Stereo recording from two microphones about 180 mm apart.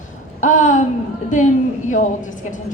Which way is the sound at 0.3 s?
45° left (ahead or behind).